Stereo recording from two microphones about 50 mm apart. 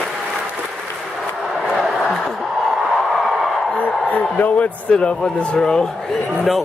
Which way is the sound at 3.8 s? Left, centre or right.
Left.